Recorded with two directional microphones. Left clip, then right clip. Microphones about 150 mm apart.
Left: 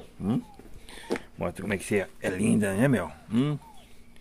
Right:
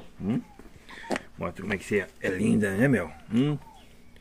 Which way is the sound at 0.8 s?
25° left (ahead or behind).